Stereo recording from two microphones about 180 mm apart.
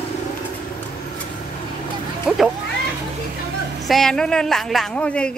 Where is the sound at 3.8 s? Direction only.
Centre (ahead or behind).